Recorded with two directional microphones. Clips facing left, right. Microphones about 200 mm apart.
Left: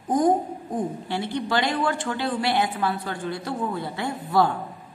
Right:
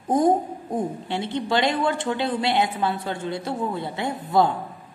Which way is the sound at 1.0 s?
25° right (ahead or behind).